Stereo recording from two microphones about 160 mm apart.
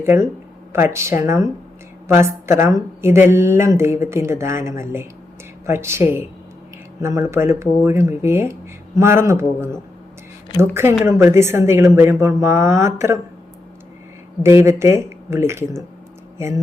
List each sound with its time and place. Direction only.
0.0 s a woman's voice: 15° right (ahead or behind)
11.0 s a woman's voice: 15° right (ahead or behind)
14.4 s a woman's voice: 15° right (ahead or behind)